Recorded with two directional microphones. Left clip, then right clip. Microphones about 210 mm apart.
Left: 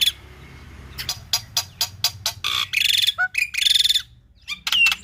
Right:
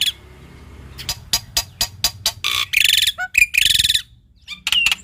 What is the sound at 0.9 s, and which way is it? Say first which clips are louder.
Music: right 2 dB; 5° right (ahead or behind).